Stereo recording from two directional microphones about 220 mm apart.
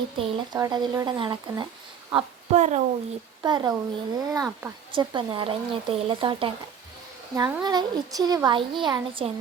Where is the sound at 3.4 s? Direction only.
20° right (ahead or behind).